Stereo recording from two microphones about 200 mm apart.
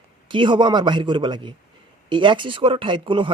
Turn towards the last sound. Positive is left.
turn(degrees=-25)  # may be behind; listen again after turning